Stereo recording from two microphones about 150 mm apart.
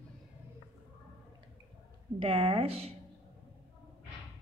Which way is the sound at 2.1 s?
40° right (ahead or behind).